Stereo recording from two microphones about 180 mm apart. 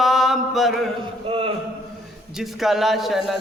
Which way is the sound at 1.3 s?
30° right (ahead or behind).